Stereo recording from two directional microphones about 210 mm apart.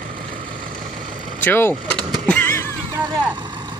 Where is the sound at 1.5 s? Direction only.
10° left (ahead or behind).